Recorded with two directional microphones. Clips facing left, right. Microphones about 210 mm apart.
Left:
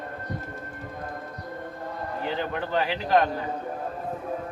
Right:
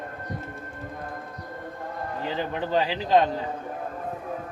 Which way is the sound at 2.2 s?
20° right (ahead or behind).